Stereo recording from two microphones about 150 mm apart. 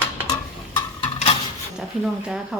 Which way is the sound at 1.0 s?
40° left (ahead or behind).